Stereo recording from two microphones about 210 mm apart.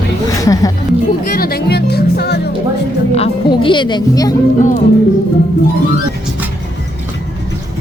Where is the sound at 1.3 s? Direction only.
45° left (ahead or behind).